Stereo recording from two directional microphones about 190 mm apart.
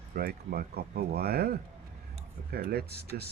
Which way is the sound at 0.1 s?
55° right (ahead or behind).